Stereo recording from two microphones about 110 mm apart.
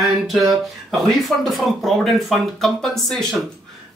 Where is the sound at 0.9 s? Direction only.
Centre (ahead or behind).